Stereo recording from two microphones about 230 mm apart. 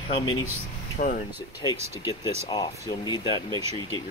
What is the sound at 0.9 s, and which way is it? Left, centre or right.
Speech, left.